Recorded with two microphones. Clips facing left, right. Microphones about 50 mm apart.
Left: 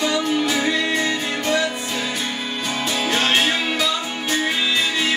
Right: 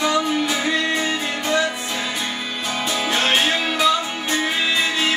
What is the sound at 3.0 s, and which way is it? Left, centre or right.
Music, centre.